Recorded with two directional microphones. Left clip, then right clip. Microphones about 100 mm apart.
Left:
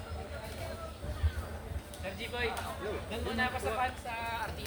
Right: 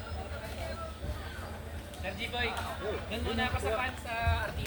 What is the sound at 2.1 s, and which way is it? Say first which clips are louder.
Speech: right 1 dB; 40° left (ahead or behind).